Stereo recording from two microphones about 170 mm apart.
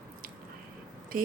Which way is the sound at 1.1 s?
55° right (ahead or behind).